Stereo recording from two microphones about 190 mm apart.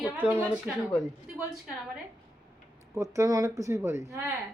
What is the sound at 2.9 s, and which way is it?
Speech, 15° right (ahead or behind).